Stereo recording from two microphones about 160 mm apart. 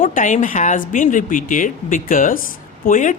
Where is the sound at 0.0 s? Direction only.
55° left (ahead or behind).